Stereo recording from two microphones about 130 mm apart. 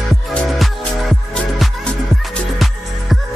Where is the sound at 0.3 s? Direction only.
Centre (ahead or behind).